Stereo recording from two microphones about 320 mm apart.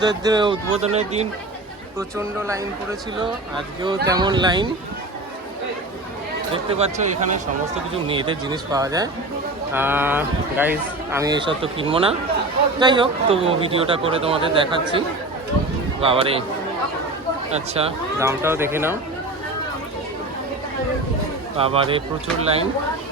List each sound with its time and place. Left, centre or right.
0.0 s speech: centre
2.0 s speech: centre
3.8 s speech: centre
6.5 s speech: centre
17.5 s speech: centre
21.6 s speech: centre